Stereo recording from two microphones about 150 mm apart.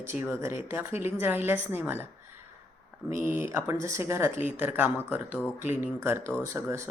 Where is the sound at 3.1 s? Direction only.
15° right (ahead or behind).